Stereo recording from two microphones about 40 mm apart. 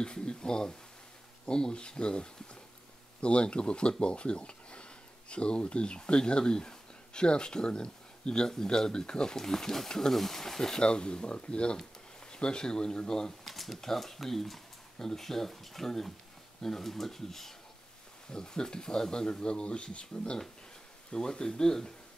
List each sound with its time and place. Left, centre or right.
0.0 s speech: left
10.8 s speech: left
13.4 s speech: centre